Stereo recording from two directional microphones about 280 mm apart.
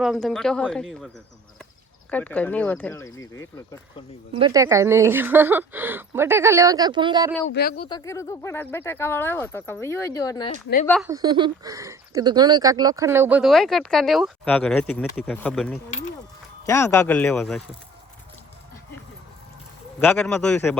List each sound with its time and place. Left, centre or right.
0.0 s speech: centre
4.4 s speech: centre
7.5 s speech: left
7.8 s speech: centre
11.0 s speech: centre
20.0 s speech: centre